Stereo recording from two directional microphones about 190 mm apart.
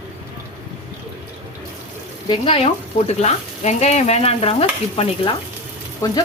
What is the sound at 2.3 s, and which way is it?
Speech, 30° left (ahead or behind).